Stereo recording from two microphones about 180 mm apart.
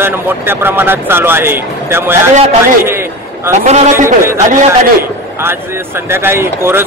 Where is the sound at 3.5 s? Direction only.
45° right (ahead or behind).